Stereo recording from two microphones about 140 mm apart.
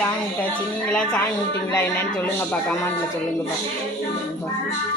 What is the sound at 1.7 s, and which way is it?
A man's voice, 20° left (ahead or behind).